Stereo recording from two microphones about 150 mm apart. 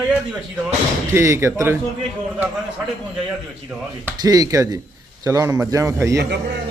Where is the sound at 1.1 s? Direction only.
20° right (ahead or behind).